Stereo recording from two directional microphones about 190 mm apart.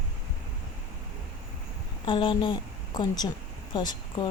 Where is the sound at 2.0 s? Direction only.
25° left (ahead or behind).